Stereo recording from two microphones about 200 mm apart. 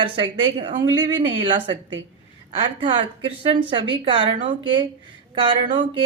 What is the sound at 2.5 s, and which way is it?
A woman's voice, 25° right (ahead or behind).